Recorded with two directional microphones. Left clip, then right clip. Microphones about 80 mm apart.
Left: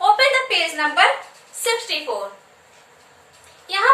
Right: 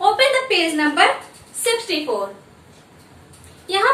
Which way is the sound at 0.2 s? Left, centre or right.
Left.